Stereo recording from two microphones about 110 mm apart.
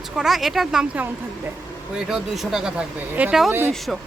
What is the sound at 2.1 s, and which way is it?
Speech, centre (ahead or behind).